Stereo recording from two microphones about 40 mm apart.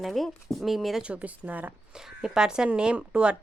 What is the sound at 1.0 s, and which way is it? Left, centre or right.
Speech, right.